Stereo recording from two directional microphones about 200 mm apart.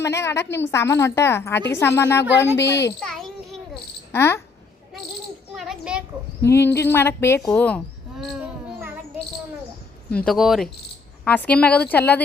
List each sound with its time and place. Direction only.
0.0 s a woman's voice: 15° left (ahead or behind)
2.6 s speech: 60° left (ahead or behind)
3.0 s a sound: centre (ahead or behind)
4.1 s a woman's voice: 10° left (ahead or behind)
5.5 s children playing: 5° right (ahead or behind)
6.4 s a woman's voice: 10° left (ahead or behind)
10.1 s a woman's voice: 5° left (ahead or behind)